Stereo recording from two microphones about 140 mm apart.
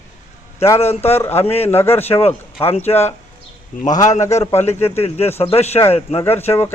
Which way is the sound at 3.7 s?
65° left (ahead or behind).